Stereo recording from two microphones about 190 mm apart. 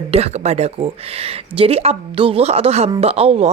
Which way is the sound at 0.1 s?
35° right (ahead or behind).